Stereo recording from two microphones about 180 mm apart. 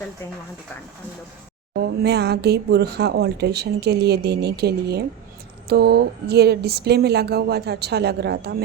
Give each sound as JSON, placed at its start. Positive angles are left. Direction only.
{"t": 1.8, "sound": "speech", "side_deg": -65}